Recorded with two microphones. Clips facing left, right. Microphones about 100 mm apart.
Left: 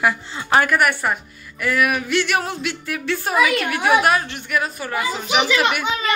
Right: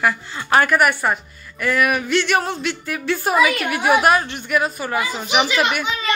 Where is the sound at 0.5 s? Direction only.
5° right (ahead or behind).